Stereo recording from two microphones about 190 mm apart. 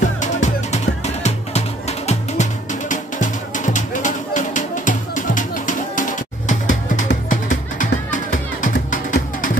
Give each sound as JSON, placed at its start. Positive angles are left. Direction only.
{"t": 0.0, "sound": "music", "side_deg": 40}